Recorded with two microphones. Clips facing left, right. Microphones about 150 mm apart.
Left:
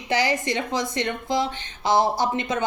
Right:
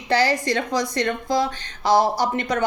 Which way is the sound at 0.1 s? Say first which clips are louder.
Right 3 dB; 15° left (ahead or behind).